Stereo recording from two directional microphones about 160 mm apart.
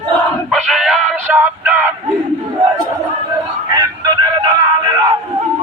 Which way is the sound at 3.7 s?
25° right (ahead or behind).